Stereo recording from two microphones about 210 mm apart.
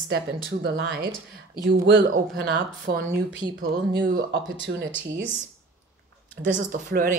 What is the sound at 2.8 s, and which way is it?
A man's voice, 50° right (ahead or behind).